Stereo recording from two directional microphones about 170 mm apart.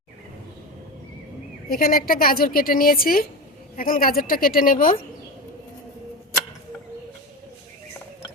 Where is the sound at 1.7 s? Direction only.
60° left (ahead or behind).